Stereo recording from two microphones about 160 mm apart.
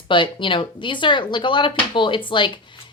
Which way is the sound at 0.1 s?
30° left (ahead or behind).